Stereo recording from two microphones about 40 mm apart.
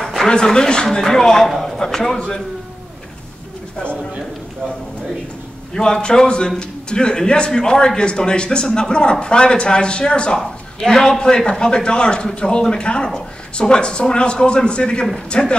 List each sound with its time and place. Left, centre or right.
0.0 s a sound: centre
0.3 s a man's voice: centre
5.8 s a man's voice: centre
10.4 s a man's voice: centre